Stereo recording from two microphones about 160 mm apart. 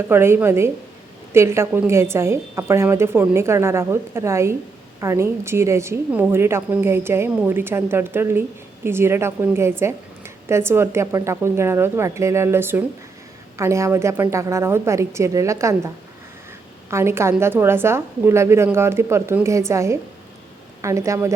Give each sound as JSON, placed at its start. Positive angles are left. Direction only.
{"t": 0.1, "sound": "a woman's voice", "side_deg": -15}
{"t": 16.9, "sound": "a woman's voice", "side_deg": -15}